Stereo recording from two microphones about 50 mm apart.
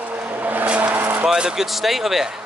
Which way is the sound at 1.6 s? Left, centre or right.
Centre.